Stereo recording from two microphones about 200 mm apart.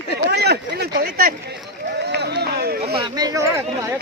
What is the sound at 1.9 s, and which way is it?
Run, 60° right (ahead or behind).